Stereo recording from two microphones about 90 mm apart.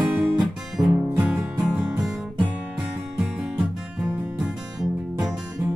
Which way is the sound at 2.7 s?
10° right (ahead or behind).